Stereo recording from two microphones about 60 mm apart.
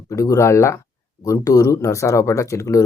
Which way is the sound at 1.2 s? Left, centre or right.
Left.